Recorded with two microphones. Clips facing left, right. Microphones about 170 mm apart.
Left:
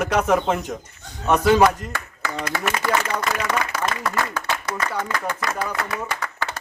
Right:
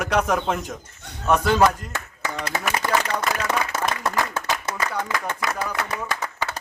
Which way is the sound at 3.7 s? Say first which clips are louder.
Even; 20° right (ahead or behind).